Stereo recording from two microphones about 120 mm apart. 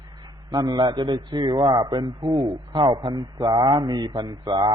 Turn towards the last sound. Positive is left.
turn(degrees=-40)  # may be behind; listen again after turning